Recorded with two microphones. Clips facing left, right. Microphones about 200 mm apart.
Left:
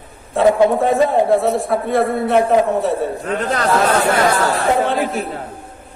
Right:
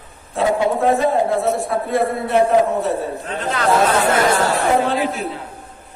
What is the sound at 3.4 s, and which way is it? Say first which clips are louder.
Speech: left 2 dB; 40° left (ahead or behind).